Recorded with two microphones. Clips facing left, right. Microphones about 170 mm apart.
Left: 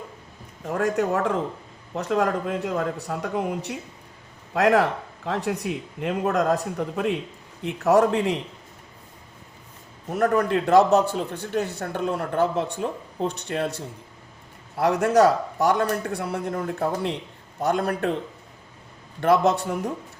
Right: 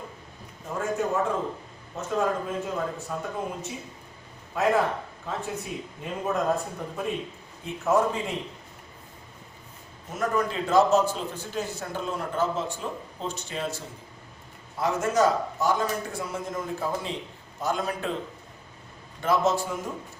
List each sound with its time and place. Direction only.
0.7 s speech: 70° left (ahead or behind)
10.1 s a man's voice: 65° left (ahead or behind)
19.5 s a man's voice: 65° left (ahead or behind)